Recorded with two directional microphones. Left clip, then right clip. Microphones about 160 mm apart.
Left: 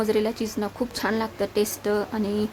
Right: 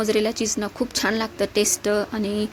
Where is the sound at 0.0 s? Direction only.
15° right (ahead or behind).